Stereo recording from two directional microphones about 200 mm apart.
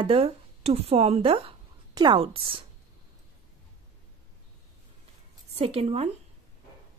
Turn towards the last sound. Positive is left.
turn(degrees=-30)  # may be behind; listen again after turning